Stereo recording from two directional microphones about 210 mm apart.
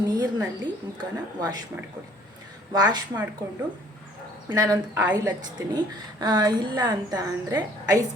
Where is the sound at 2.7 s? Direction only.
20° right (ahead or behind).